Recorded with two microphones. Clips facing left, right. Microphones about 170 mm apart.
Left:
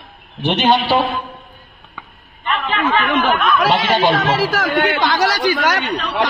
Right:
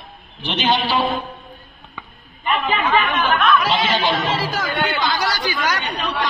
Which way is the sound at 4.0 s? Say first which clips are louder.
Left 5 dB; 80° left.